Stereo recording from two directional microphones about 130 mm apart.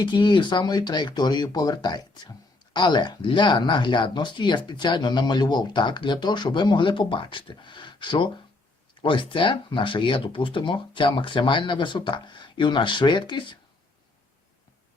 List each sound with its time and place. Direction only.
0.0 s speech: 35° left (ahead or behind)